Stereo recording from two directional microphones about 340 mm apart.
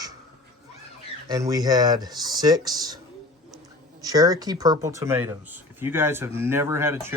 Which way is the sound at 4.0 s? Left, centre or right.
Centre.